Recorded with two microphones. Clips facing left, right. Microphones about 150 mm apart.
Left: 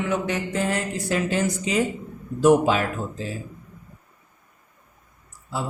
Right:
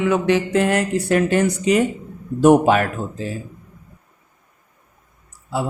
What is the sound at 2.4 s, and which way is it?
Speech, 60° right (ahead or behind).